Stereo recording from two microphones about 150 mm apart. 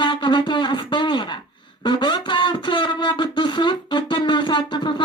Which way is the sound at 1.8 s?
30° left (ahead or behind).